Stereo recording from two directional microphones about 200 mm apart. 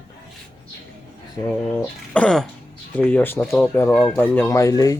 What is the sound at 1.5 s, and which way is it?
Speech, 5° left (ahead or behind).